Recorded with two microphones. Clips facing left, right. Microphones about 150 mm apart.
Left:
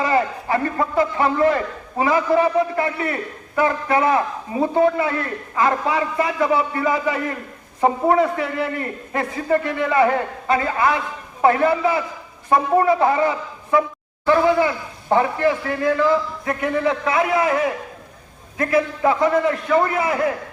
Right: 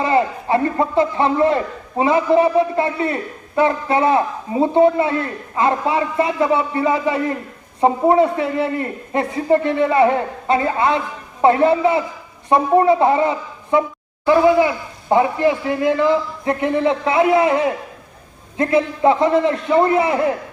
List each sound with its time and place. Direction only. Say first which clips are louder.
0.0 s a man's voice: right 2 dB; 25° right (ahead or behind)